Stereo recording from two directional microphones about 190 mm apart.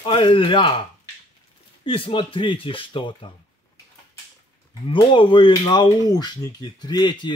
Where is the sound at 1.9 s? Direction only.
25° left (ahead or behind).